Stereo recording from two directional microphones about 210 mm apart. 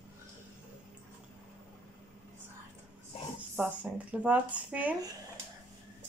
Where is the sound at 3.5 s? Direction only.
5° right (ahead or behind).